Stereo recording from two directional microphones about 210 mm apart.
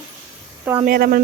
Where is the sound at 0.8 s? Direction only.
45° right (ahead or behind).